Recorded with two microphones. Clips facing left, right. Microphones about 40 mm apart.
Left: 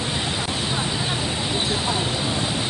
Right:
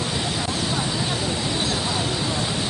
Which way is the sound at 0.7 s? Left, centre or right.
Left.